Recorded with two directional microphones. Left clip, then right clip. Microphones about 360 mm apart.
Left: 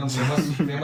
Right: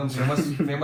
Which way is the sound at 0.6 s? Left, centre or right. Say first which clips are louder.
Even; left.